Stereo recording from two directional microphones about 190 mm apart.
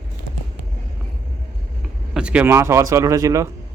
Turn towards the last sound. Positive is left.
turn(degrees=-15)  # may be behind; listen again after turning